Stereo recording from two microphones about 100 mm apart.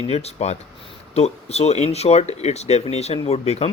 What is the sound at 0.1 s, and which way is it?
Speech, 90° left.